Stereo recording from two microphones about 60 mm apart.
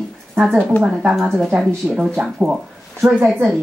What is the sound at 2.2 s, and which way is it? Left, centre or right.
Speech, centre.